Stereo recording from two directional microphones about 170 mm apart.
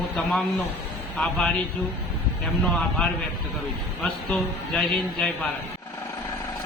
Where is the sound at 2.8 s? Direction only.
Centre (ahead or behind).